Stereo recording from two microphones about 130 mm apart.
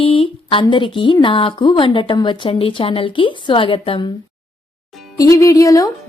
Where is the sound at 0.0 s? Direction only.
45° left (ahead or behind).